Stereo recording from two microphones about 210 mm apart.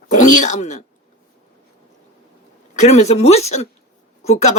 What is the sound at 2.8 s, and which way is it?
A woman's voice, 30° left (ahead or behind).